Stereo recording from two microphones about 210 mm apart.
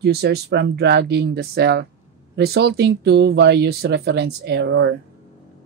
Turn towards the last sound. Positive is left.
turn(degrees=-55)  # may be behind; listen again after turning